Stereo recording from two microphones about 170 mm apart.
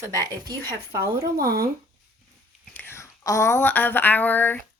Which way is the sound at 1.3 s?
65° right (ahead or behind).